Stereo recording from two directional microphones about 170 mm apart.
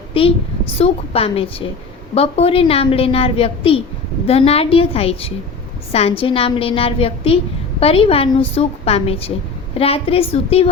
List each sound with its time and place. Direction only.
0.1 s a woman's voice: 35° left (ahead or behind)